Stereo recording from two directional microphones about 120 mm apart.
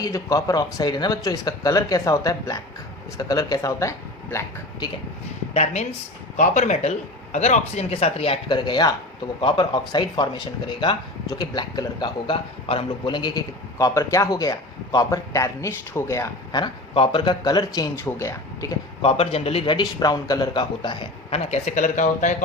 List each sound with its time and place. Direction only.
0.0 s speech: 25° left (ahead or behind)
6.3 s speech: 85° left; by 8.4 s 55° left (ahead or behind)
8.4 s speech: 40° left (ahead or behind)
16.9 s speech: 45° left (ahead or behind); by 18.8 s 25° left (ahead or behind)
19.0 s speech: 55° left (ahead or behind)
21.2 s speech: 60° left (ahead or behind); by 22.4 s 90° left